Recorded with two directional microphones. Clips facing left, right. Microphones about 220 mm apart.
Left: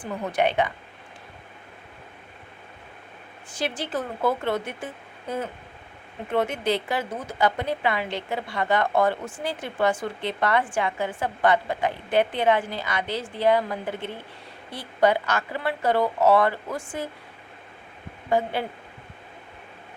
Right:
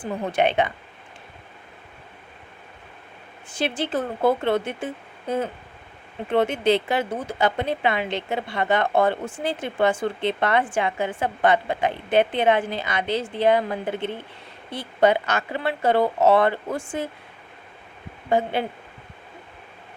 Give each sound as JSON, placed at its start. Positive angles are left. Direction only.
{"t": 0.0, "sound": "a woman's voice", "side_deg": -25}
{"t": 3.5, "sound": "a woman's voice", "side_deg": -25}
{"t": 6.3, "sound": "a woman's voice", "side_deg": -30}
{"t": 18.3, "sound": "a woman's voice", "side_deg": -25}